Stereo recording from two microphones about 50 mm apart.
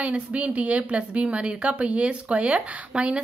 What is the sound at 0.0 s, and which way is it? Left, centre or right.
A woman's voice, right.